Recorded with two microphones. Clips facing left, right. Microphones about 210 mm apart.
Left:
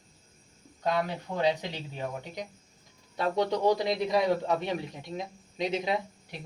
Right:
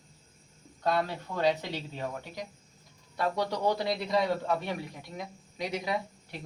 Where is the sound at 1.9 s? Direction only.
20° left (ahead or behind).